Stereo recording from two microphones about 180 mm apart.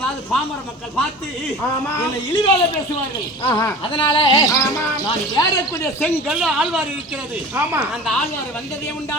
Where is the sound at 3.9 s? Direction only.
30° left (ahead or behind).